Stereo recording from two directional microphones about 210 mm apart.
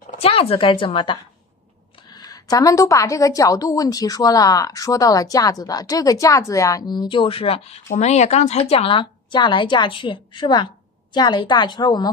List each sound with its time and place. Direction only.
0.0 s a woman's voice: 35° left (ahead or behind)